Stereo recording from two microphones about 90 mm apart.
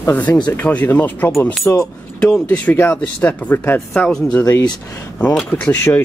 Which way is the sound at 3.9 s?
5° left (ahead or behind).